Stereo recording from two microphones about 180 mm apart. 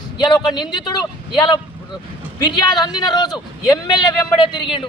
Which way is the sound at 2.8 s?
25° left (ahead or behind).